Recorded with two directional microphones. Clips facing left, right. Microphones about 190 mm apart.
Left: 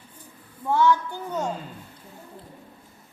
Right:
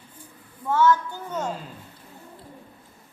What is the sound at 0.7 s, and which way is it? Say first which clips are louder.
Speech: even; 15° left (ahead or behind).